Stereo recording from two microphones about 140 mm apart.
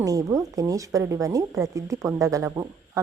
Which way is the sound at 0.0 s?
25° right (ahead or behind).